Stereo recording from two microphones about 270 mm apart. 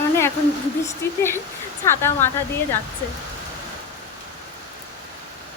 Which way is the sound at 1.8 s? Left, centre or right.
Centre.